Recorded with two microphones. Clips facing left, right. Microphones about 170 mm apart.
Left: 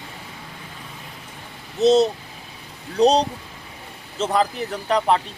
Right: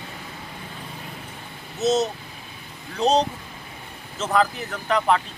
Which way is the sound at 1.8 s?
30° left (ahead or behind).